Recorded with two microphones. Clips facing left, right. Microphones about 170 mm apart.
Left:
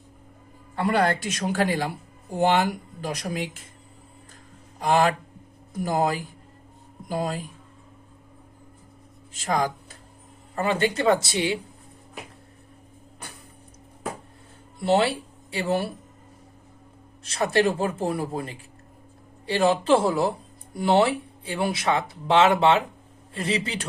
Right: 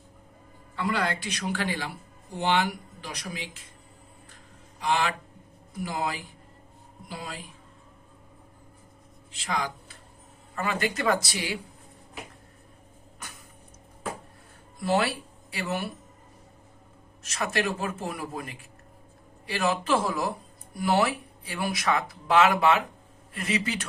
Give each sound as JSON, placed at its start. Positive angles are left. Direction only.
{"t": 0.8, "sound": "speech", "side_deg": 50}
{"t": 4.8, "sound": "speech", "side_deg": 45}
{"t": 9.3, "sound": "speech", "side_deg": 45}
{"t": 10.5, "sound": "speech", "side_deg": 30}
{"t": 14.8, "sound": "speech", "side_deg": 25}
{"t": 17.2, "sound": "speech", "side_deg": 30}